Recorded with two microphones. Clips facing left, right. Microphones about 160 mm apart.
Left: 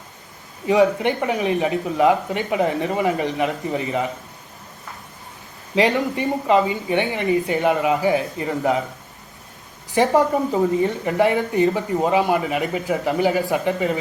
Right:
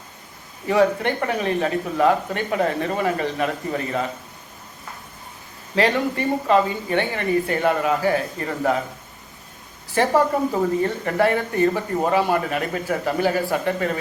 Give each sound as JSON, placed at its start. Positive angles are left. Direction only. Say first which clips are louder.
{"t": 0.7, "sound": "speech", "louder": "left 2 dB", "side_deg": 15}
{"t": 5.7, "sound": "speech", "louder": "left 1 dB", "side_deg": 15}
{"t": 9.9, "sound": "speech", "louder": "left 2 dB", "side_deg": 15}